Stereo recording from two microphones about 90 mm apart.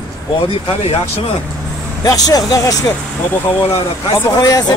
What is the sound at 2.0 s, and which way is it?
Speech, 45° left (ahead or behind).